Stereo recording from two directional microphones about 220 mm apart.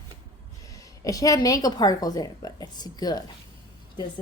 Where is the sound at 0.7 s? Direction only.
15° left (ahead or behind).